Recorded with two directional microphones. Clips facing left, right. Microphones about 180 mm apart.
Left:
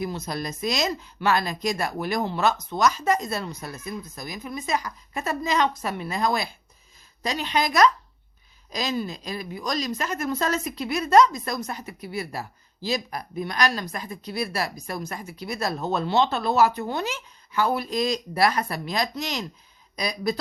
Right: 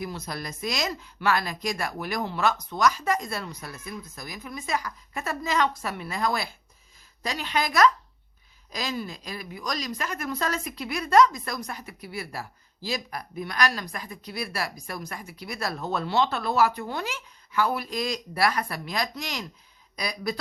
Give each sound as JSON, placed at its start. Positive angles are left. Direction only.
{"t": 0.0, "sound": "a woman's voice", "side_deg": 25}